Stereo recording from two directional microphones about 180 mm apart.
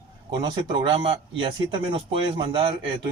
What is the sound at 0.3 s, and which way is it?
Speech, 25° right (ahead or behind).